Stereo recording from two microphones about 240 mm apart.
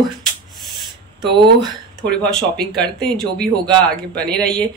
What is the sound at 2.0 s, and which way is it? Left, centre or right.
Speech, centre.